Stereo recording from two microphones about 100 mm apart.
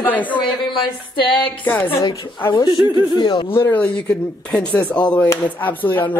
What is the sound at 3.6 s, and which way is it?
Speech, 15° left (ahead or behind).